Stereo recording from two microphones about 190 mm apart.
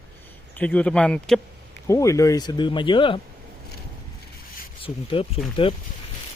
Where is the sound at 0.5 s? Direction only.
10° left (ahead or behind).